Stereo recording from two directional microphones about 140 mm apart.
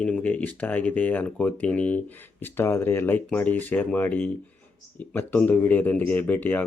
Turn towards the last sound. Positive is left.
turn(degrees=15)  # may be behind; listen again after turning